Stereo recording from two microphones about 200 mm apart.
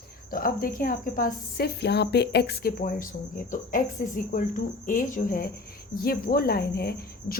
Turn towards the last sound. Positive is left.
turn(degrees=50)  # may be behind; listen again after turning